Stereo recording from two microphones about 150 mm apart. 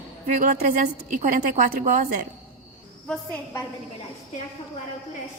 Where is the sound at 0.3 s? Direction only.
60° right (ahead or behind).